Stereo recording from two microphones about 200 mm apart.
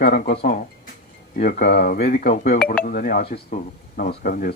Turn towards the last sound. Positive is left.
turn(degrees=45)  # may be behind; listen again after turning